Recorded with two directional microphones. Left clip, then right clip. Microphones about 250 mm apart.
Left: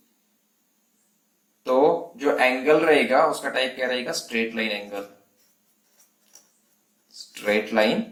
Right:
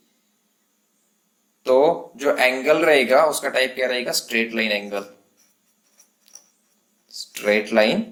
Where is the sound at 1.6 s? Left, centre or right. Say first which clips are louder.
Right 3 dB; right.